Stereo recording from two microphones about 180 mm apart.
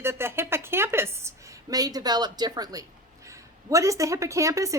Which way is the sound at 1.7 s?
20° right (ahead or behind).